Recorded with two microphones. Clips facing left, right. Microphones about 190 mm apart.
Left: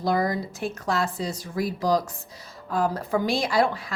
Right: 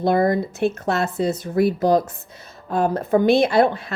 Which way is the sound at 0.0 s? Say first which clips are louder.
Right 6 dB; 60° right (ahead or behind).